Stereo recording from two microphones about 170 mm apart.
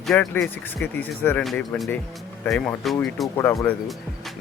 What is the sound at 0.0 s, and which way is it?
Speech, 5° left (ahead or behind).